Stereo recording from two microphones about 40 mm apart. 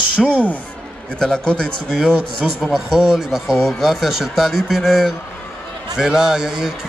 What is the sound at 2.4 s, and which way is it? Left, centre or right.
Speech, centre.